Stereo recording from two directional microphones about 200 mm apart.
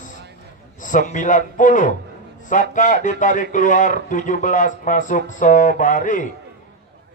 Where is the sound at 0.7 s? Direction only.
40° left (ahead or behind).